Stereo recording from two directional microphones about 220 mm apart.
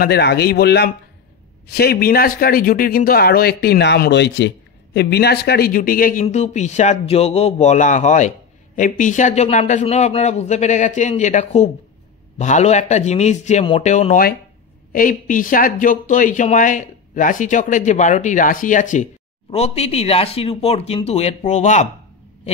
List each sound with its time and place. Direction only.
0.0 s speech: 50° left (ahead or behind); by 21.8 s 30° left (ahead or behind)